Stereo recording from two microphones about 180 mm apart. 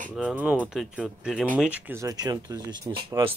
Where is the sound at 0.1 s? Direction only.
5° right (ahead or behind).